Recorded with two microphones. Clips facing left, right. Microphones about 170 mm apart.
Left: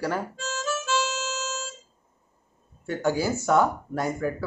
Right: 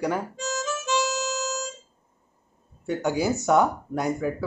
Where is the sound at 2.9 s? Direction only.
15° right (ahead or behind).